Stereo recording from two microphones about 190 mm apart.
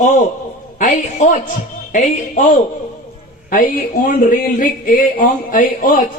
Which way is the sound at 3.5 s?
45° left (ahead or behind).